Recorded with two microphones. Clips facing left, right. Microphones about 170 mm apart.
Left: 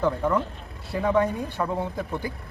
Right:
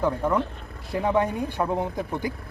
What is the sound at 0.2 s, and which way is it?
Speech, 10° right (ahead or behind).